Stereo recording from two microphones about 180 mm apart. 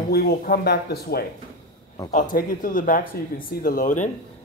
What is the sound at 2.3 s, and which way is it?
Speech, 50° left (ahead or behind).